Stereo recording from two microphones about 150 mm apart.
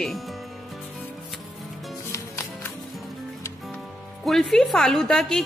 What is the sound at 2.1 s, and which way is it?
Music, 20° left (ahead or behind).